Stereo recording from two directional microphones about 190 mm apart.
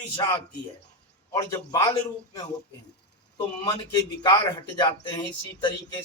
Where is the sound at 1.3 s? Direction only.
20° left (ahead or behind).